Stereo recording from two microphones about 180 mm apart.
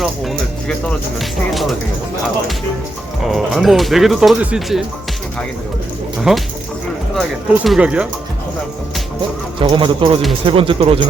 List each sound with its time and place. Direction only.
3.2 s speech: centre (ahead or behind)
6.3 s speech: 5° right (ahead or behind)
9.6 s a man's voice: 30° right (ahead or behind)